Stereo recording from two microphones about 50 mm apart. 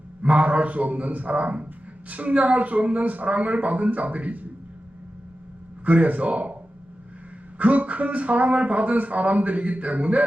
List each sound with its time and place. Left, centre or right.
0.2 s speech: right
5.8 s a man's voice: right
7.6 s speech: right